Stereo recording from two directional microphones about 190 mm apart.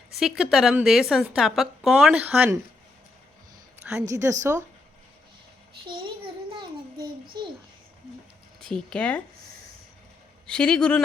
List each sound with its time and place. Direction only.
0.1 s a woman's voice: centre (ahead or behind)
4.1 s a woman's voice: 15° right (ahead or behind)
7.3 s a child's voice: 20° right (ahead or behind)
8.6 s a woman's voice: 5° left (ahead or behind)
10.4 s a woman's voice: 5° left (ahead or behind)